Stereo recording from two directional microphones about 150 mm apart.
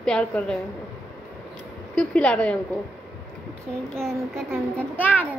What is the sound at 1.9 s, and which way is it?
Speech, 5° left (ahead or behind).